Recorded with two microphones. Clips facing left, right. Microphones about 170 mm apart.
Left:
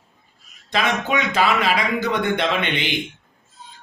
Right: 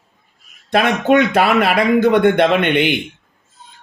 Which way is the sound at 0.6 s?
55° right (ahead or behind).